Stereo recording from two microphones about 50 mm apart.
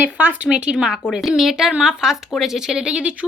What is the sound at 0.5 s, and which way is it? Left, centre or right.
Speech, centre.